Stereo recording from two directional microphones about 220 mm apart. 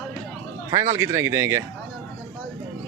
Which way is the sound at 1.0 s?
15° right (ahead or behind).